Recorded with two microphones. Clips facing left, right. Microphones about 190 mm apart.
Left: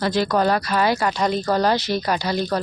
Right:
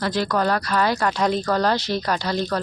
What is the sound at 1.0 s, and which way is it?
Speech, centre (ahead or behind).